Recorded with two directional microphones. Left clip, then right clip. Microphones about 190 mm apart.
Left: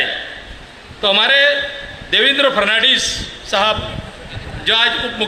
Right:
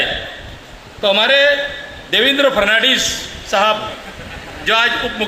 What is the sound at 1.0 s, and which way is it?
A man's voice, 15° left (ahead or behind).